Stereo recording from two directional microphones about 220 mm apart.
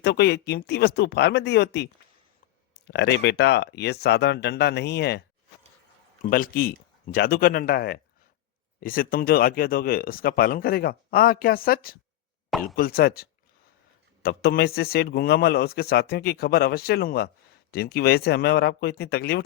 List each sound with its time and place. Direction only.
0.0 s a man's voice: 50° left (ahead or behind)
6.2 s a man's voice: 40° left (ahead or behind)
12.5 s a sound: centre (ahead or behind)
12.7 s a man's voice: 45° left (ahead or behind)